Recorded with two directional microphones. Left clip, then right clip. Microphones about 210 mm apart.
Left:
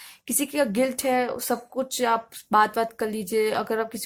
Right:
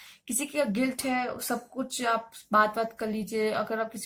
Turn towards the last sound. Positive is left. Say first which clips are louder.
# left 5 dB
turn(degrees=45)  # may be behind; listen again after turning